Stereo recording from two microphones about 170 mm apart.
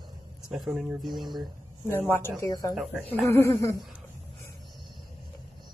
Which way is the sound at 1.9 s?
15° left (ahead or behind).